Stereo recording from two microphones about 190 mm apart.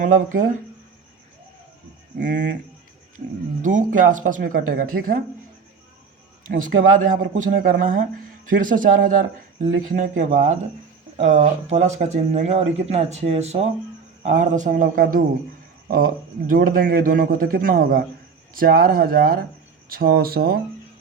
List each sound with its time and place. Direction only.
0.0 s speech: 45° right (ahead or behind)
2.2 s speech: 40° right (ahead or behind)
3.6 s speech: 40° right (ahead or behind)
6.6 s speech: 45° right (ahead or behind)
16.5 s speech: 50° right (ahead or behind)